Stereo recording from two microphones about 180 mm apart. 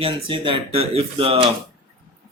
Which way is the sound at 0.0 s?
30° right (ahead or behind).